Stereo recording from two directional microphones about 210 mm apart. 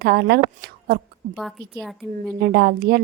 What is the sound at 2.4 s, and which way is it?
Speech, 50° right (ahead or behind).